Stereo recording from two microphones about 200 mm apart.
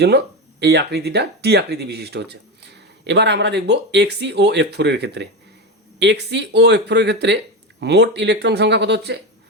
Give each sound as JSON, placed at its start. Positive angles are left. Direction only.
{"t": 0.0, "sound": "speech", "side_deg": -55}